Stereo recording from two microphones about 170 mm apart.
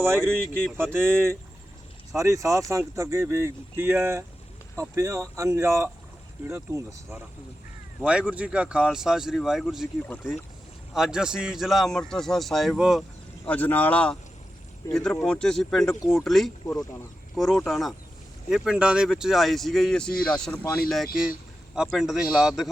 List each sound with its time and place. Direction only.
0.8 s speech: 15° right (ahead or behind)
10.9 s speech: 5° right (ahead or behind)
16.6 s speech: 20° left (ahead or behind)
17.3 s speech: centre (ahead or behind)